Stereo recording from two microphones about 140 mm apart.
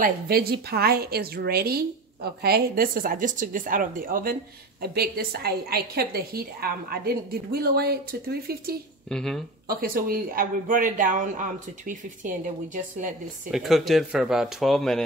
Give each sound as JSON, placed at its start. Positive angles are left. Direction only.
{"t": 0.0, "sound": "a woman's voice", "side_deg": -90}
{"t": 9.1, "sound": "speech", "side_deg": 5}
{"t": 9.7, "sound": "speech", "side_deg": -90}
{"t": 13.5, "sound": "speech", "side_deg": 0}